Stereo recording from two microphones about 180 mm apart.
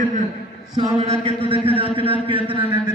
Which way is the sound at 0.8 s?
35° right (ahead or behind).